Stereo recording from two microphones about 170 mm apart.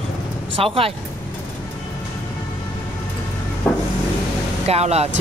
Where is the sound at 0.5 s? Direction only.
35° right (ahead or behind).